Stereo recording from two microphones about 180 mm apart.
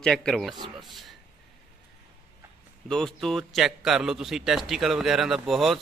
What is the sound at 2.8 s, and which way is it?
A man's voice, 5° left (ahead or behind).